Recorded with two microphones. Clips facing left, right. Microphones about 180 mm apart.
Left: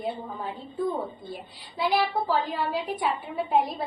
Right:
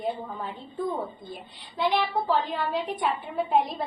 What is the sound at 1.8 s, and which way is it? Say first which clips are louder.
A woman's voice: even; 10° left (ahead or behind).